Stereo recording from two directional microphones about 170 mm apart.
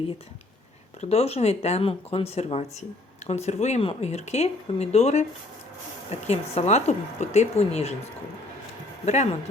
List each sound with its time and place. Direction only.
1.0 s speech: 35° left (ahead or behind)